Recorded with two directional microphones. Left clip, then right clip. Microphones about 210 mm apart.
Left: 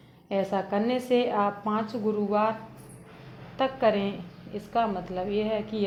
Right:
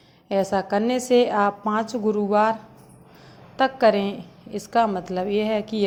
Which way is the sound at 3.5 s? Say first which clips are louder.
Right 6 dB; 25° right (ahead or behind).